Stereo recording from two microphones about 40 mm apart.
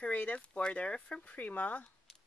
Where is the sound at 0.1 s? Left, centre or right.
Left.